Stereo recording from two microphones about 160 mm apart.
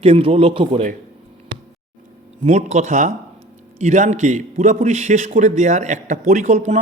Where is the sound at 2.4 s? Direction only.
45° right (ahead or behind).